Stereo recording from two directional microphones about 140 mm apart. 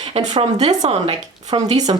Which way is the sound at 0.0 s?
45° right (ahead or behind).